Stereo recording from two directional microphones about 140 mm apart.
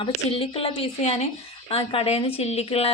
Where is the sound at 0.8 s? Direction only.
55° left (ahead or behind).